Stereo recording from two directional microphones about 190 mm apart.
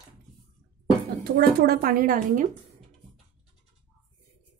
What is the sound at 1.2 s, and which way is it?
A woman's voice, 55° right (ahead or behind).